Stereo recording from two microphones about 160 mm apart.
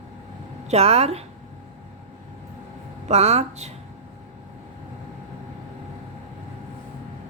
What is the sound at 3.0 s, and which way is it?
Speech, 40° right (ahead or behind).